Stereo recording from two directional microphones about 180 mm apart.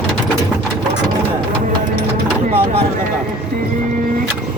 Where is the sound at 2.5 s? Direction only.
35° right (ahead or behind).